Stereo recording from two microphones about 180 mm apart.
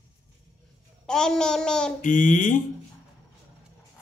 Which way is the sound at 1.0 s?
5° left (ahead or behind).